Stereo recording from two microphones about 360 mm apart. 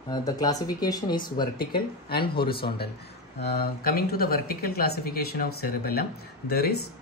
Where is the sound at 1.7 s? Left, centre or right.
Left.